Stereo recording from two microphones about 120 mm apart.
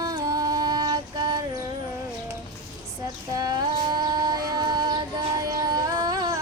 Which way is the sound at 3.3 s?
30° right (ahead or behind).